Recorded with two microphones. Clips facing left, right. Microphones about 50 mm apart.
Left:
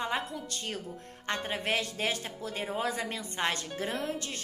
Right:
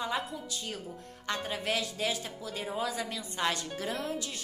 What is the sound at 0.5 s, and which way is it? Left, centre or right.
Speech, left.